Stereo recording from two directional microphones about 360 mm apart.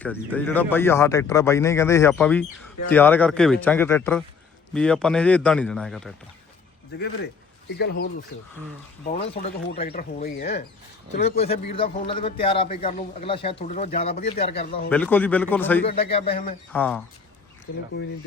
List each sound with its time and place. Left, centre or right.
0.0 s a man's voice: centre
7.8 s speech: left
9.0 s a man's voice: centre
14.8 s a man's voice: centre
15.9 s a man's voice: centre
16.7 s a man's voice: centre
17.7 s speech: left